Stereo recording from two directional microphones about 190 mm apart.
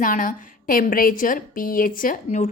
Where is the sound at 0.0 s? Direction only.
45° left (ahead or behind).